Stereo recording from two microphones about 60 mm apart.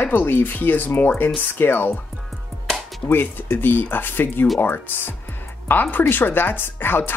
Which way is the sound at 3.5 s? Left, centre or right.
Left.